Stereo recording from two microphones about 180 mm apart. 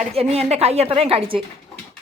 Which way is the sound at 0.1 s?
35° right (ahead or behind).